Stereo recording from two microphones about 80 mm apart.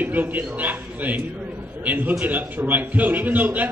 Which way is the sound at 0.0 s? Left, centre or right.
Right.